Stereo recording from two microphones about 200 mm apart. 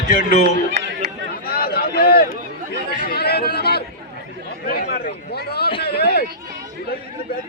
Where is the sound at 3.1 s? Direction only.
50° left (ahead or behind).